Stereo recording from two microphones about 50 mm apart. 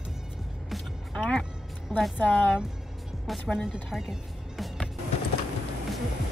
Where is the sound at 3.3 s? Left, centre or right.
Centre.